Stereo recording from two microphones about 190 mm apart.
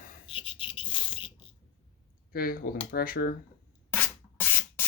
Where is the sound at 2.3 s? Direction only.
50° left (ahead or behind).